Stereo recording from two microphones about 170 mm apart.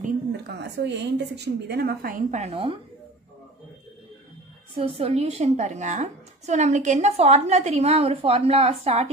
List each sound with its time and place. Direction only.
0.4 s a woman's voice: 85° right; by 2.2 s 60° right (ahead or behind)
2.3 s a woman's voice: 35° right (ahead or behind)
4.7 s a woman's voice: 35° right (ahead or behind)